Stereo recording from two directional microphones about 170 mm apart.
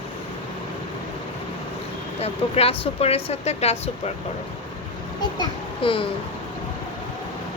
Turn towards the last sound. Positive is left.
turn(degrees=30)  # may be behind; listen again after turning